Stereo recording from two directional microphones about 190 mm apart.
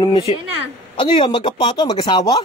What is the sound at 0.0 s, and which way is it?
Speech, 30° left (ahead or behind).